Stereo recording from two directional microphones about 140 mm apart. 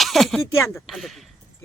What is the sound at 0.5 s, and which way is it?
Speech, 20° left (ahead or behind).